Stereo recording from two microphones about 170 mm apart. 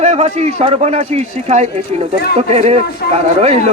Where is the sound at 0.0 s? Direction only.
40° right (ahead or behind).